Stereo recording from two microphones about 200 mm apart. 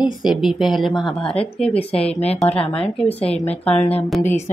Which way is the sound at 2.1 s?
30° left (ahead or behind).